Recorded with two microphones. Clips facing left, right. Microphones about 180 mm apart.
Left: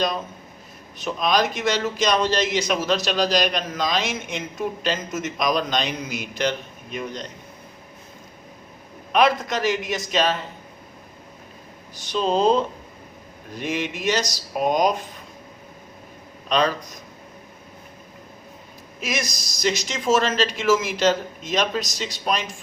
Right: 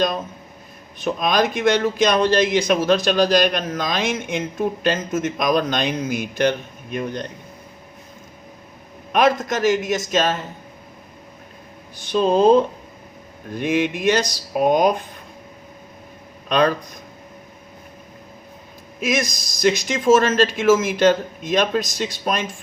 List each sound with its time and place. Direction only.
1.0 s a man's voice: 50° right (ahead or behind)
9.1 s a man's voice: 45° right (ahead or behind)
11.9 s a man's voice: 55° right (ahead or behind)
16.5 s speech: 55° right (ahead or behind)
19.1 s a man's voice: 55° right (ahead or behind)